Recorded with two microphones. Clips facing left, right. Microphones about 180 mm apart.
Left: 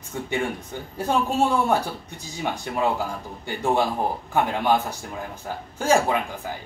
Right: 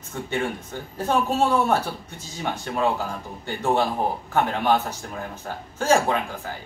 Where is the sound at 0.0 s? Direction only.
15° left (ahead or behind).